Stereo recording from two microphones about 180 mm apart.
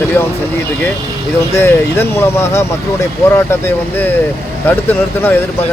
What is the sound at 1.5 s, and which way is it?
Speech, 15° left (ahead or behind).